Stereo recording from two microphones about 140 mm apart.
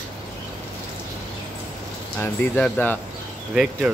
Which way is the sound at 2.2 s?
10° left (ahead or behind).